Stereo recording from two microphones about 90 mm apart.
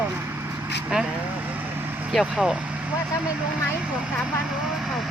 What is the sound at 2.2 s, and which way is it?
Speech, 10° right (ahead or behind).